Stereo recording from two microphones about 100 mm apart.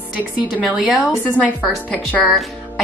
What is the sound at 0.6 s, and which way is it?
Speech, 5° right (ahead or behind).